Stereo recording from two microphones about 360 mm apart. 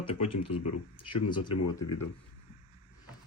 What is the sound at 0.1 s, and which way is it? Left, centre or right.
Speech, left.